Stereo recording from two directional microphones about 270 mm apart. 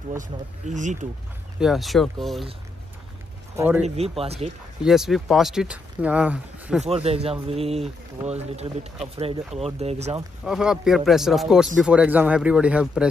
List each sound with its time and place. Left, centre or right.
0.2 s speech: right
1.6 s speech: centre
3.5 s speech: centre
3.8 s speech: right
4.8 s speech: centre
6.8 s speech: right
10.4 s speech: centre